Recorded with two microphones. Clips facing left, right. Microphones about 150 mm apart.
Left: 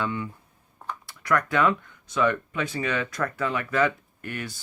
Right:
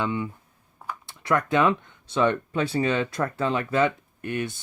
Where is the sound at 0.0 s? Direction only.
20° right (ahead or behind).